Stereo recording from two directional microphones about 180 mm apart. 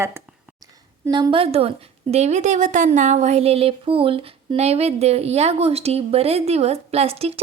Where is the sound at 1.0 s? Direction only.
25° right (ahead or behind).